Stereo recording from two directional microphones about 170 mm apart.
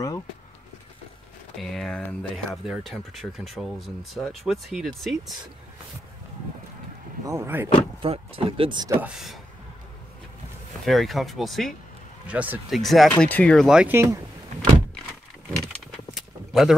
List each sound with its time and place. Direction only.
1.6 s speech: centre (ahead or behind)
7.2 s speech: 15° right (ahead or behind)
8.0 s speech: 30° right (ahead or behind)
8.9 s speech: 5° right (ahead or behind)
10.9 s speech: centre (ahead or behind)
13.9 s speech: 15° right (ahead or behind)
16.2 s a sound: centre (ahead or behind)